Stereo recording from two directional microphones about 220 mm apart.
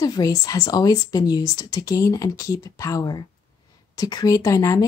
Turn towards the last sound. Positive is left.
turn(degrees=15)  # may be behind; listen again after turning